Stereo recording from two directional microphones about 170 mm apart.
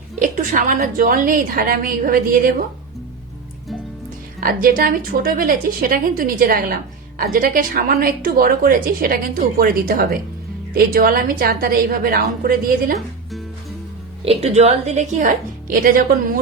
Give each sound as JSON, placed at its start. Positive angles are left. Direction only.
{"t": 0.2, "sound": "a woman's voice", "side_deg": -50}
{"t": 4.4, "sound": "a woman's voice", "side_deg": -60}
{"t": 14.3, "sound": "a woman's voice", "side_deg": -40}